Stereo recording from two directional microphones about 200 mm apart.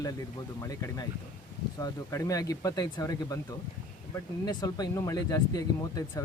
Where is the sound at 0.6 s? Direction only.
15° left (ahead or behind).